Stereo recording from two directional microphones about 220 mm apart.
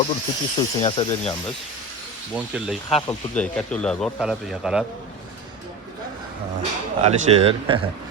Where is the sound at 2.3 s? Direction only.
5° right (ahead or behind).